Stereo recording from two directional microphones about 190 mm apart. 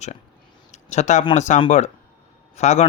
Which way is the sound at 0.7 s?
35° left (ahead or behind).